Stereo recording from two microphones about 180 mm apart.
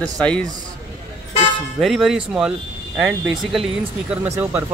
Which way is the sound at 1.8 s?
Centre (ahead or behind).